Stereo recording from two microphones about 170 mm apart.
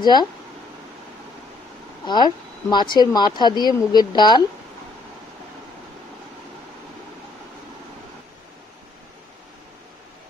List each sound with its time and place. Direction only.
0.0 s speech: 25° left (ahead or behind)
2.0 s speech: 25° left (ahead or behind)